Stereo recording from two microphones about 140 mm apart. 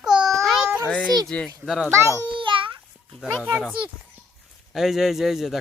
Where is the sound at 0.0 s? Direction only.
5° right (ahead or behind).